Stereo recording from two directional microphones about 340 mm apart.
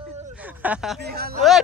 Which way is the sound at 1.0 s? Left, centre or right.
Right.